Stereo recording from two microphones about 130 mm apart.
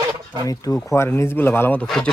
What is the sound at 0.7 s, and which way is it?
Speech, 20° left (ahead or behind).